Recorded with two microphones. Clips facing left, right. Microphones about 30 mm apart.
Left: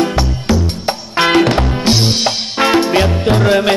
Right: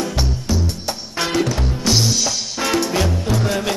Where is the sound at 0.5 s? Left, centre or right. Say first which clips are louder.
Left 7 dB; left.